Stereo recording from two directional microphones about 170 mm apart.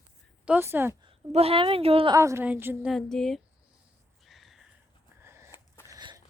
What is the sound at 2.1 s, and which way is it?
Speech, 15° right (ahead or behind).